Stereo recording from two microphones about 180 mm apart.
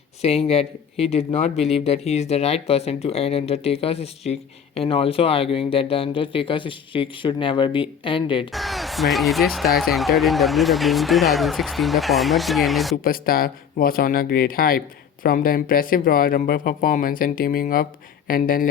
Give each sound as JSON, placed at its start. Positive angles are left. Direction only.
{"t": 0.2, "sound": "speech", "side_deg": 35}
{"t": 8.5, "sound": "speech", "side_deg": 0}
{"t": 13.1, "sound": "speech", "side_deg": 55}